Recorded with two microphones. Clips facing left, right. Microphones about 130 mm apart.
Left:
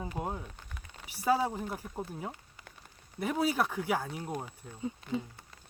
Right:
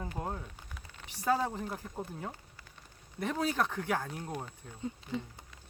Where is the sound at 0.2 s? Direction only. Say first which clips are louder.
Left 2 dB; 5° left (ahead or behind).